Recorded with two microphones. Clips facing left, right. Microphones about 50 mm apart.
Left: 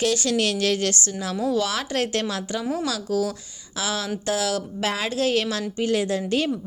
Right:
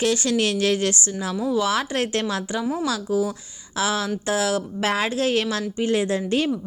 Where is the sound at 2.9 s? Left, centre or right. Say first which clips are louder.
Right 2 dB; right.